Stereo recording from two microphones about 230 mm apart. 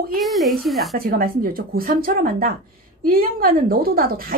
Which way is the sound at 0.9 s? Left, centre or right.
Right.